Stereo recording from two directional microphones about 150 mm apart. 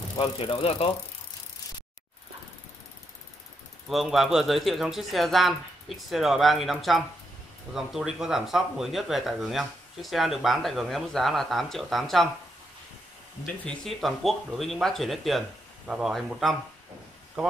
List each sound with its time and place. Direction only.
0.2 s speech: 40° left (ahead or behind)
3.9 s speech: centre (ahead or behind)
13.7 s speech: centre (ahead or behind)